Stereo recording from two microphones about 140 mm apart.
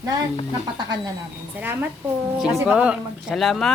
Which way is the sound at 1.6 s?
10° right (ahead or behind).